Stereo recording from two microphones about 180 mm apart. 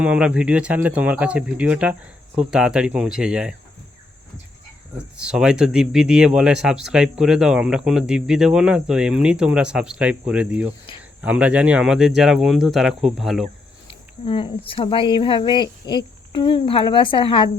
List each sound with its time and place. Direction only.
0.0 s speech: 5° right (ahead or behind)
5.1 s speech: 5° right (ahead or behind)
14.3 s speech: 30° left (ahead or behind)